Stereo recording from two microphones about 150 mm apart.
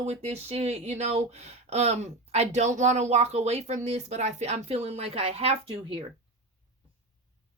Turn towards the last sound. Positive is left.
turn(degrees=-40)  # may be behind; listen again after turning